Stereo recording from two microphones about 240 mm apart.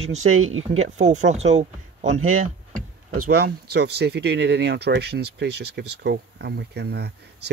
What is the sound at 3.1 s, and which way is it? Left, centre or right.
Speech, right.